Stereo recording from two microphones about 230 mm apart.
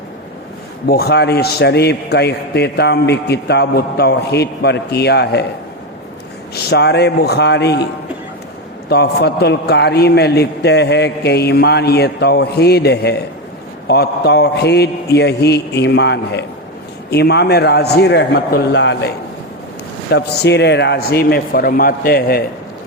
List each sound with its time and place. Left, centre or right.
0.9 s a man's voice: left
6.5 s a man's voice: left
8.9 s a man's voice: left